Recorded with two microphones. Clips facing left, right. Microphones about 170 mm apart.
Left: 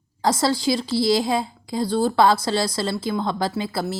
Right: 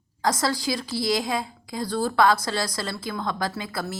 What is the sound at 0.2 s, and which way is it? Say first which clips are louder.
A woman's voice: left 4 dB; 30° left (ahead or behind).